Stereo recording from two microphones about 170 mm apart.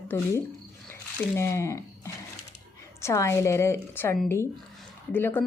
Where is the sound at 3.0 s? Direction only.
15° left (ahead or behind).